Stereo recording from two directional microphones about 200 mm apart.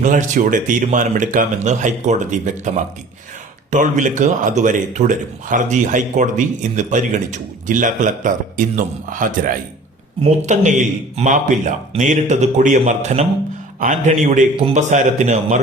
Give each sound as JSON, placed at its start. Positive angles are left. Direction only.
{"t": 0.0, "sound": "speech", "side_deg": -40}
{"t": 3.7, "sound": "speech", "side_deg": -40}